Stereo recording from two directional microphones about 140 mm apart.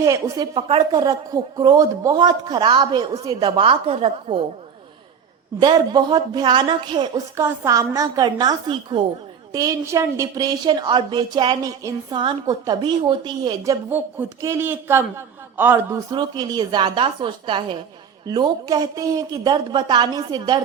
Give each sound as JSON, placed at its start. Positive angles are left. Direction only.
{"t": 0.0, "sound": "speech", "side_deg": -25}
{"t": 0.5, "sound": "speech", "side_deg": -35}
{"t": 1.0, "sound": "speech", "side_deg": -25}
{"t": 5.5, "sound": "speech", "side_deg": -30}
{"t": 7.3, "sound": "speech", "side_deg": -20}
{"t": 13.9, "sound": "a man's voice", "side_deg": -20}
{"t": 16.0, "sound": "speech", "side_deg": -30}